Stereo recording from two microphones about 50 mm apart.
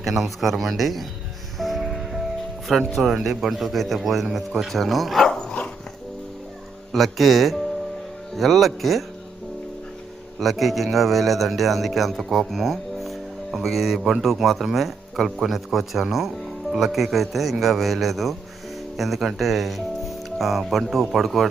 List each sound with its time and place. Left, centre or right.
0.0 s a man's voice: centre
1.5 s music: centre
2.6 s a man's voice: centre
5.3 s dog: centre
6.9 s a man's voice: centre
10.4 s a man's voice: centre